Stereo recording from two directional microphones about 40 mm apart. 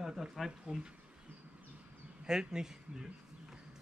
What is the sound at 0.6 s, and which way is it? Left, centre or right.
Speech, centre.